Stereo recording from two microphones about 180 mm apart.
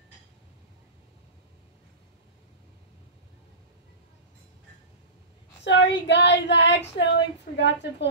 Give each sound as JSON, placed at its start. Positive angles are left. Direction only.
{"t": 5.6, "sound": "child singing", "side_deg": 75}